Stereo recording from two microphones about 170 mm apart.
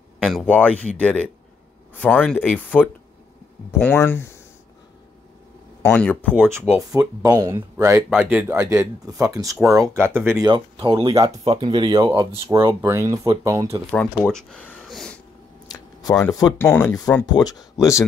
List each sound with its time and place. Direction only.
0.2 s speech: 5° left (ahead or behind)
5.8 s speech: 10° left (ahead or behind)
6.3 s speech: 10° right (ahead or behind)
7.2 s speech: 20° right (ahead or behind)
10.4 s speech: 25° right (ahead or behind)
14.3 s a sound: 5° left (ahead or behind)
15.7 s a sound: 20° left (ahead or behind)
16.3 s speech: 20° left (ahead or behind)
16.5 s speech: 10° left (ahead or behind)